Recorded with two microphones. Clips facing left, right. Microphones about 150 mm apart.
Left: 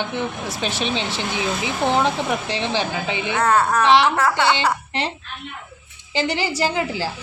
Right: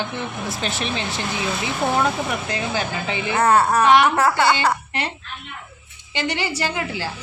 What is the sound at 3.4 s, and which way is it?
Speech, 25° right (ahead or behind).